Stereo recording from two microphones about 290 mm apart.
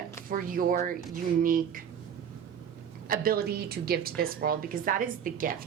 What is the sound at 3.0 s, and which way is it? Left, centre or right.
A woman's voice, right.